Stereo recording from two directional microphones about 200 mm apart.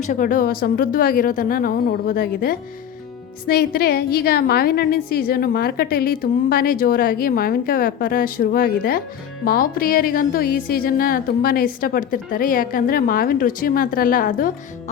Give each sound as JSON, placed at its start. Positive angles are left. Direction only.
{"t": 0.0, "sound": "a woman's voice", "side_deg": 40}